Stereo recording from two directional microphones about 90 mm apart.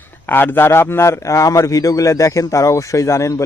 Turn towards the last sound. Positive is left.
turn(degrees=35)  # may be behind; listen again after turning